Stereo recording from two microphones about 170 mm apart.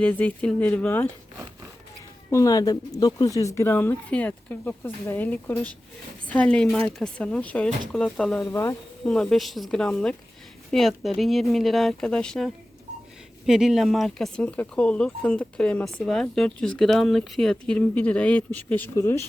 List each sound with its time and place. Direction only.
0.0 s speech: 10° left (ahead or behind)
2.3 s speech: 20° left (ahead or behind)
8.4 s speech: 15° left (ahead or behind)
9.0 s speech: 5° left (ahead or behind)